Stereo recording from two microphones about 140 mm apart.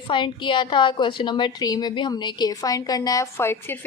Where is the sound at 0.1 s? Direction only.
35° left (ahead or behind).